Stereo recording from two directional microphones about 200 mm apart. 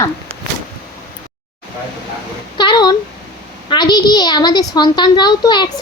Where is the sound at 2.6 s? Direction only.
20° left (ahead or behind).